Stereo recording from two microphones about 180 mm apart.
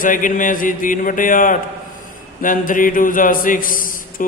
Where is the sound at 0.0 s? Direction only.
50° left (ahead or behind).